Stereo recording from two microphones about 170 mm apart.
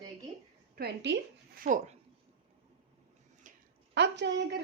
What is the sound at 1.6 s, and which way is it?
Speech, 50° right (ahead or behind).